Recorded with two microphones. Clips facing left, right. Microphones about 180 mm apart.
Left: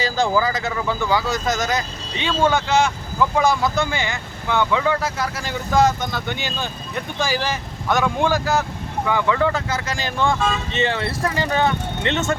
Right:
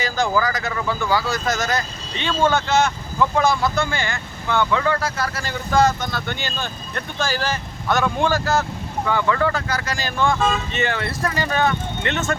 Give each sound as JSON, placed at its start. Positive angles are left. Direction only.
{"t": 0.4, "sound": "speech", "side_deg": 25}
{"t": 0.7, "sound": "speech", "side_deg": 10}